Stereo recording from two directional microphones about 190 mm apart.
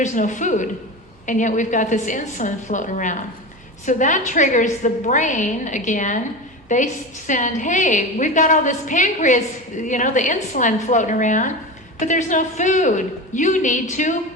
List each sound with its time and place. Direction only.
0.0 s a woman's voice: 40° left (ahead or behind)